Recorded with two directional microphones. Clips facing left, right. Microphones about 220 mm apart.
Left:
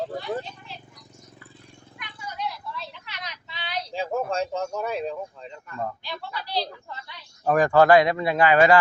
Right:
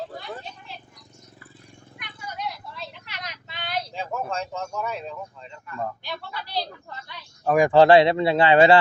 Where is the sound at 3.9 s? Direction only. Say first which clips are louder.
Left 8 dB; 35° left (ahead or behind).